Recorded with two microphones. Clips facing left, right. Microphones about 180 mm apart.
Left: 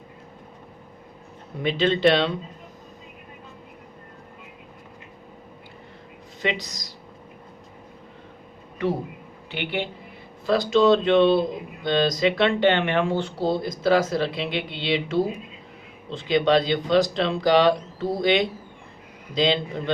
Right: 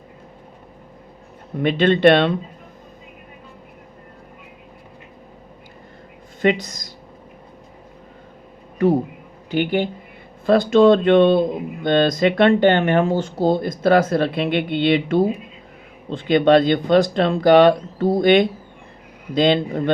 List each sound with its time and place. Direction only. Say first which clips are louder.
1.6 s speech: right 6 dB; 55° right (ahead or behind)
6.4 s speech: right 9 dB; 50° right (ahead or behind)
9.5 s speech: right 9 dB; 45° right (ahead or behind)